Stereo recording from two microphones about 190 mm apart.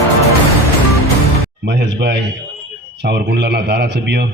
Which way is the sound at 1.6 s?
65° right (ahead or behind).